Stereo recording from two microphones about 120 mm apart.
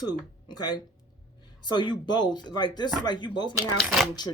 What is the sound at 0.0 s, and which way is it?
Speech, 35° left (ahead or behind).